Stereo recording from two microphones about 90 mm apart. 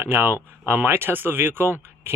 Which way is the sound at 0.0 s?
25° right (ahead or behind).